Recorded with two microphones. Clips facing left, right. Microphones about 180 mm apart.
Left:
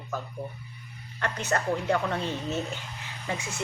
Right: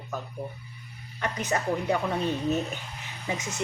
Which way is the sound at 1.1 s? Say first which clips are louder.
Even; 15° right (ahead or behind).